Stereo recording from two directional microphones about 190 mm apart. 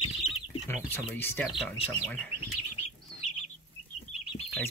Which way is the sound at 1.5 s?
Centre (ahead or behind).